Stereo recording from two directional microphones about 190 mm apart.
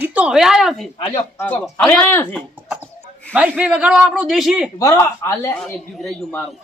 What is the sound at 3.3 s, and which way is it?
Speech, 10° right (ahead or behind).